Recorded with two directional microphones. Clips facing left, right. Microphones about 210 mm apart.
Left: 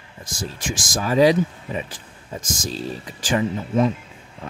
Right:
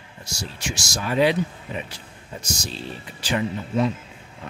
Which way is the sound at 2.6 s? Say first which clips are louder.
Left 5 dB; 40° left (ahead or behind).